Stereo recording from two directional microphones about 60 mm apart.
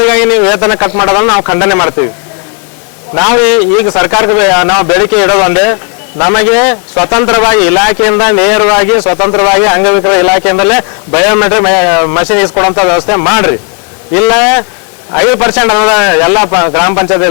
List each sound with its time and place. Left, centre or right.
0.0 s a man's voice: centre
3.2 s a man's voice: centre